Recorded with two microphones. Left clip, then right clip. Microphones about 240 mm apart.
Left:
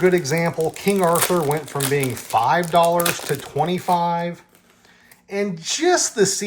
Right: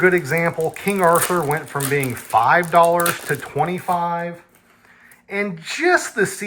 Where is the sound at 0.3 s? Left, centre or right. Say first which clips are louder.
Right 1 dB; centre.